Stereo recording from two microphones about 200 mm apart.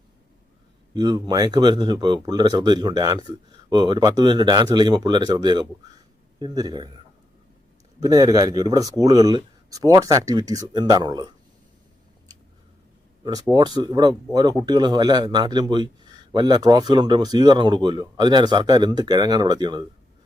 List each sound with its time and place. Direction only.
0.9 s speech: 20° right (ahead or behind)
8.0 s speech: 20° right (ahead or behind)
13.2 s speech: 20° right (ahead or behind)